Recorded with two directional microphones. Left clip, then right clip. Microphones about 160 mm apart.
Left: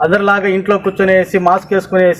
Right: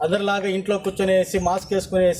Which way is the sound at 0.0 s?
30° right (ahead or behind).